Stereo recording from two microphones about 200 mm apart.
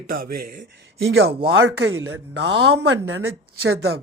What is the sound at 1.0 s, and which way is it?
Speech, 65° right (ahead or behind).